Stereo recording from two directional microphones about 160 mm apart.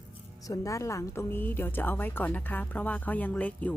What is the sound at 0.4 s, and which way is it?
Speech, 20° left (ahead or behind).